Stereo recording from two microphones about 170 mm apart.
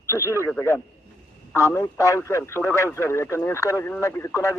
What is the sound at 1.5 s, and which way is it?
Speech, 20° left (ahead or behind).